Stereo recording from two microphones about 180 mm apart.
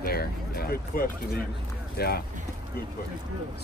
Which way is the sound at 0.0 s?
60° left (ahead or behind).